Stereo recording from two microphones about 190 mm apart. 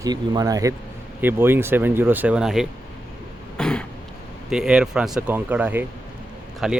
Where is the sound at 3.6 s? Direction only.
5° left (ahead or behind).